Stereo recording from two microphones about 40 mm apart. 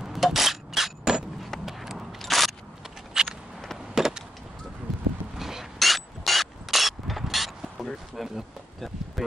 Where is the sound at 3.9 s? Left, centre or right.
Centre.